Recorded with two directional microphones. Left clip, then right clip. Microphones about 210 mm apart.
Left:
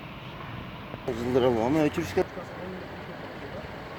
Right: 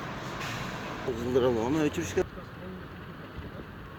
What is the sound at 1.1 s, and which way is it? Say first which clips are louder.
Speech: left 3 dB; 40° left (ahead or behind).